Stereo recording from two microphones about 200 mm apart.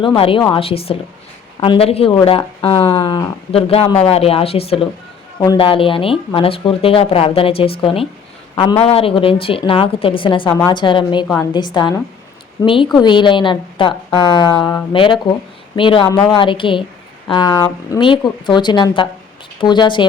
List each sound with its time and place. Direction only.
0.0 s speech: 25° left (ahead or behind)